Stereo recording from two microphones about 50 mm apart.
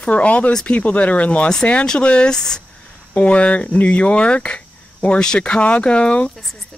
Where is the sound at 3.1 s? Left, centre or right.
Left.